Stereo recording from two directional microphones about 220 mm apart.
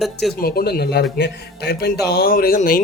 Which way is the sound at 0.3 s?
45° left (ahead or behind).